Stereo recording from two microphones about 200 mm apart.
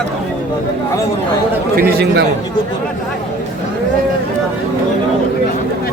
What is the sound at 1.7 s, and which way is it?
Speech, 50° right (ahead or behind).